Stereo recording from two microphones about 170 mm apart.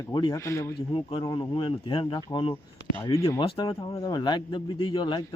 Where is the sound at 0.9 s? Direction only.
30° left (ahead or behind).